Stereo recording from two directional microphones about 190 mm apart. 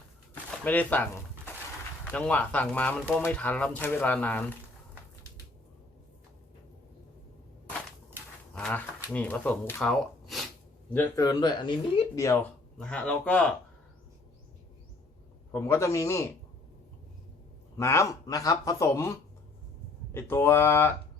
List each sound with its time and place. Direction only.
0.6 s a sound: 10° left (ahead or behind)
2.0 s speech: 5° left (ahead or behind)
8.5 s speech: 5° left (ahead or behind)
15.5 s speech: 15° left (ahead or behind)
17.7 s speech: 15° left (ahead or behind)
20.1 s speech: 10° left (ahead or behind)